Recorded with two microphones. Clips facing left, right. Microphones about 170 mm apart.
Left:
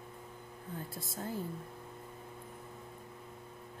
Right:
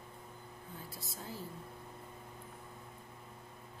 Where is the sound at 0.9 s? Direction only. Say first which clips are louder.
Left 5 dB; 50° left (ahead or behind).